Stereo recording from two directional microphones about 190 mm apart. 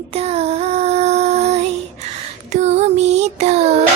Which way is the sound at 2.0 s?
35° right (ahead or behind).